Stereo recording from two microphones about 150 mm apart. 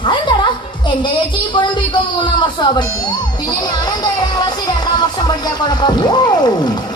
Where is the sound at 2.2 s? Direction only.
30° left (ahead or behind).